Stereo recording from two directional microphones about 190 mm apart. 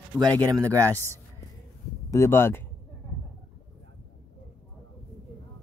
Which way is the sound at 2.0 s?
15° left (ahead or behind).